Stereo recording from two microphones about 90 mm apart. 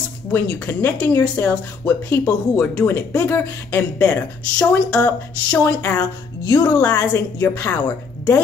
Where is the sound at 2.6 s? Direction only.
10° left (ahead or behind).